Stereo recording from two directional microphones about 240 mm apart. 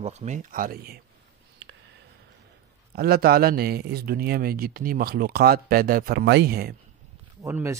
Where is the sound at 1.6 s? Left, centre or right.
Right.